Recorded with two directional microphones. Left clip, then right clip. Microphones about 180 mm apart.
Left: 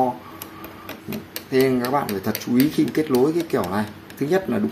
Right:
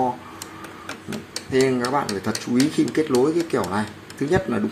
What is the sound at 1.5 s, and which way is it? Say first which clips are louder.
Speech: left 1 dB; 10° left (ahead or behind).